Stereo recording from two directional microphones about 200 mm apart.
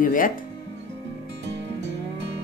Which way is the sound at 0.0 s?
45° left (ahead or behind).